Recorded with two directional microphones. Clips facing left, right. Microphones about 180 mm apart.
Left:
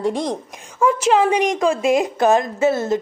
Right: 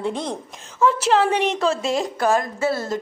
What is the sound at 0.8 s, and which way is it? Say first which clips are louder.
A woman's voice: left 2 dB; 10° left (ahead or behind).